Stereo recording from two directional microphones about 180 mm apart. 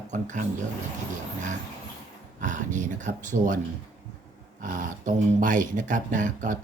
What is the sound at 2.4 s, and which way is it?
Speech, 45° right (ahead or behind).